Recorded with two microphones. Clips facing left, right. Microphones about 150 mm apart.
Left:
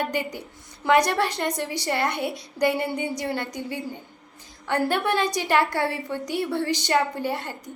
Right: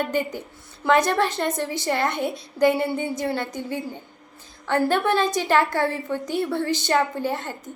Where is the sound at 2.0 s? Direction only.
50° right (ahead or behind).